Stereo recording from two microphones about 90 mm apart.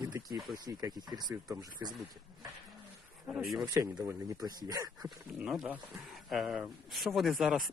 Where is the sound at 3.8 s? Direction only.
35° right (ahead or behind).